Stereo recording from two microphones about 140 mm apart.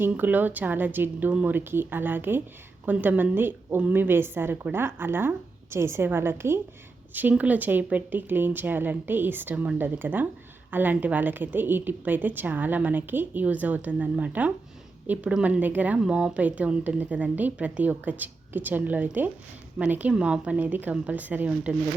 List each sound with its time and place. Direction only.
0.0 s a woman's voice: 15° right (ahead or behind)